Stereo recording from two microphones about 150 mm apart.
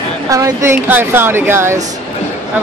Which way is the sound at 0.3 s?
20° right (ahead or behind).